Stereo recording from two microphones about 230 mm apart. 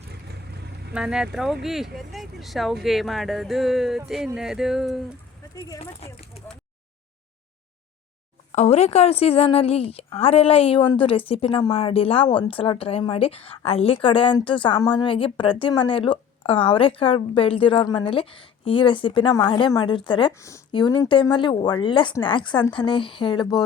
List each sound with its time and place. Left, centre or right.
0.9 s speech: centre
5.5 s speech: centre
8.5 s a woman's voice: left